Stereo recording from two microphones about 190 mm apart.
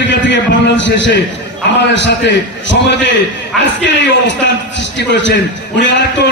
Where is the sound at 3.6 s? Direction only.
65° left (ahead or behind).